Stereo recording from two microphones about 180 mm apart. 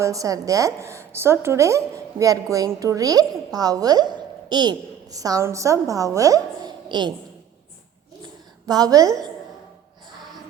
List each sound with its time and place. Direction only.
0.0 s a woman's voice: 20° right (ahead or behind)
8.6 s a woman's voice: 20° right (ahead or behind)